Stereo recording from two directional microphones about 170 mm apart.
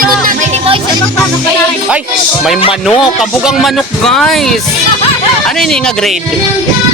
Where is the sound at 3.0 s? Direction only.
Centre (ahead or behind).